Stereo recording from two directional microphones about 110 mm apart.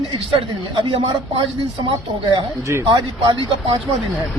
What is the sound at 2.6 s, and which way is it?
Speech, 25° right (ahead or behind).